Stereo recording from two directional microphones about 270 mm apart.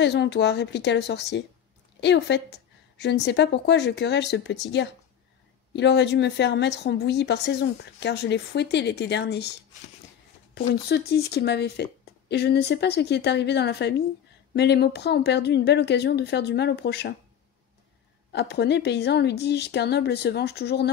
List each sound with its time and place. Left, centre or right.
0.0 s speech: left
10.7 s speech: left
18.3 s speech: left